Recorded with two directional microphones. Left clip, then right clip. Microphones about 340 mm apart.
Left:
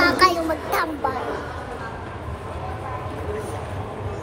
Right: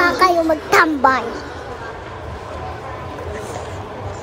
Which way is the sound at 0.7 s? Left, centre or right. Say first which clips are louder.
Right 13 dB; right.